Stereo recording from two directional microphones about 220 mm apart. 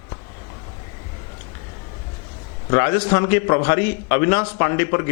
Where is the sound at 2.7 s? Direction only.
15° left (ahead or behind).